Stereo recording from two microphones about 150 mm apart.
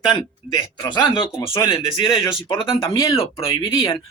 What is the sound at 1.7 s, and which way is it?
Speech, 35° left (ahead or behind).